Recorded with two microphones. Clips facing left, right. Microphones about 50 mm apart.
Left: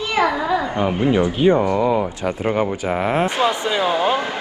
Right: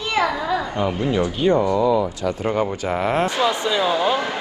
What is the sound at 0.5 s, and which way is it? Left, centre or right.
Speech, left.